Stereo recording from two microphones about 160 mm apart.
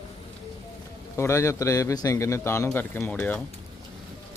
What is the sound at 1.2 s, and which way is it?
A man's voice, 15° left (ahead or behind).